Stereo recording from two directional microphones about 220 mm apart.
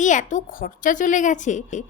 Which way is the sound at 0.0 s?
35° left (ahead or behind).